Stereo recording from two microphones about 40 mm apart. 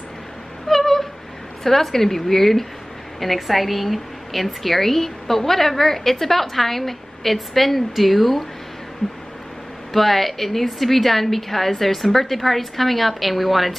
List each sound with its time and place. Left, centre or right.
0.7 s a sound: centre
1.6 s a woman's voice: centre
9.9 s a woman's voice: centre